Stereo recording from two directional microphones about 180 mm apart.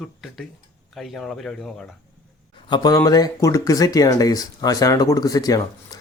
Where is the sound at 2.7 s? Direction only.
20° left (ahead or behind).